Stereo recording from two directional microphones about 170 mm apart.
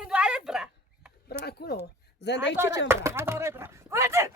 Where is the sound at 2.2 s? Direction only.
90° left.